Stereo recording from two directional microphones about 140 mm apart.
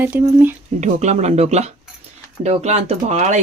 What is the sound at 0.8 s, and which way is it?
Speech, 55° right (ahead or behind).